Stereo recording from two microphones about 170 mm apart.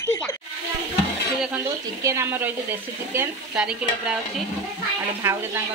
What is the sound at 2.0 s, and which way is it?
Speech, 15° right (ahead or behind).